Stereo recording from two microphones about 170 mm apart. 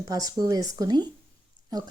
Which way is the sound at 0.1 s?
20° right (ahead or behind).